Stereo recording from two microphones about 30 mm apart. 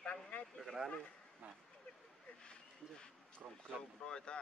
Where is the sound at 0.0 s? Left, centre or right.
Left.